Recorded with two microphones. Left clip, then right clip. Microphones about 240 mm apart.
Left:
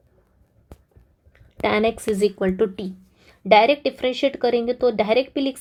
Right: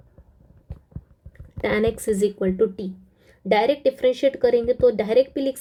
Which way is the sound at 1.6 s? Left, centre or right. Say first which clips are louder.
Left 1 dB; centre.